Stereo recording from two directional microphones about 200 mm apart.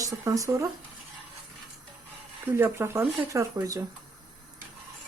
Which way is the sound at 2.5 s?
10° right (ahead or behind).